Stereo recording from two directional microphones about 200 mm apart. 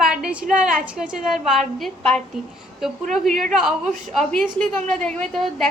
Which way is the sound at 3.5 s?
Centre (ahead or behind).